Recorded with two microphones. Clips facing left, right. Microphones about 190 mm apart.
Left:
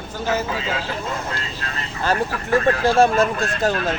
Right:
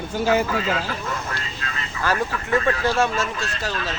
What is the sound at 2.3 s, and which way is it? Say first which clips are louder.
Speech: left 3 dB; 40° left (ahead or behind).